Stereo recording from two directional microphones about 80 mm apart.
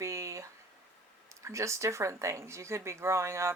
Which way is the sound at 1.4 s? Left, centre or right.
Right.